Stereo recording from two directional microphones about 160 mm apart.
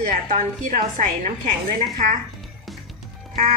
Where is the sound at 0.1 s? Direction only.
55° right (ahead or behind).